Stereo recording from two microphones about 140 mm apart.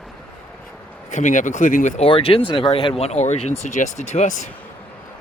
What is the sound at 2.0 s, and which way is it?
Speech, 40° left (ahead or behind).